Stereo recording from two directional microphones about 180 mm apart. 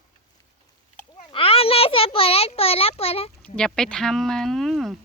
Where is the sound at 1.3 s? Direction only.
30° left (ahead or behind).